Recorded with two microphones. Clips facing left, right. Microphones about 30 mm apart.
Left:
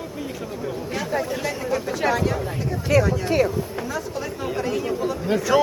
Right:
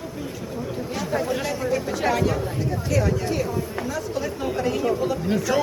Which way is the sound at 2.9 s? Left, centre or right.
Left.